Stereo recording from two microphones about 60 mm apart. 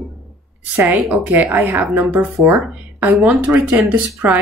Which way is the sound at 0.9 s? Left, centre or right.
Right.